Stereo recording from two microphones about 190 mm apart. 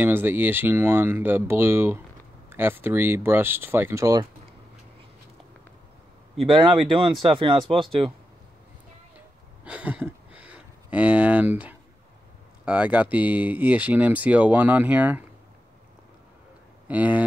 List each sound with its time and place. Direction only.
0.0 s speech: 10° right (ahead or behind)
6.4 s speech: 25° right (ahead or behind)
9.7 s speech: 5° right (ahead or behind)
16.8 s speech: 10° right (ahead or behind)